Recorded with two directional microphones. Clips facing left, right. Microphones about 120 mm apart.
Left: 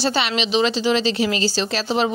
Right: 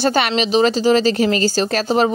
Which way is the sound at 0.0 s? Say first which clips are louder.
Right 4 dB; 50° right (ahead or behind).